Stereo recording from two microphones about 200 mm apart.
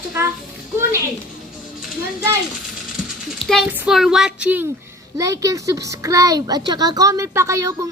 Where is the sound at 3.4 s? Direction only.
Centre (ahead or behind).